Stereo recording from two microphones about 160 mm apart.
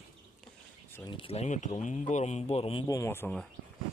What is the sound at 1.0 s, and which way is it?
Speech, 30° left (ahead or behind).